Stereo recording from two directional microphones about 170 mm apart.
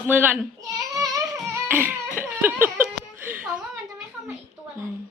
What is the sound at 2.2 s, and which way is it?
Laughter, 10° right (ahead or behind).